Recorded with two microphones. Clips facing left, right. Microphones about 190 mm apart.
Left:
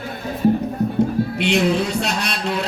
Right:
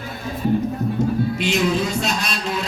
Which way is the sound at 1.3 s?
65° left (ahead or behind).